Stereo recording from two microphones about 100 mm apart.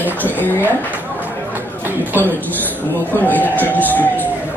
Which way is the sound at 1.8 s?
20° right (ahead or behind).